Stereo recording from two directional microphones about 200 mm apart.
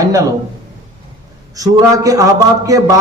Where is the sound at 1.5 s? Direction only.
15° right (ahead or behind).